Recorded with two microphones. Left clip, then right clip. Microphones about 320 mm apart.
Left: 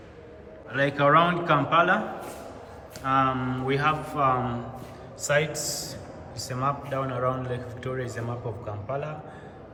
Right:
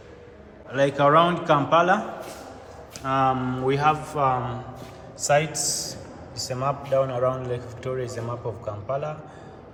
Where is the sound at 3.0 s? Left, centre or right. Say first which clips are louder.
Right 1 dB; centre.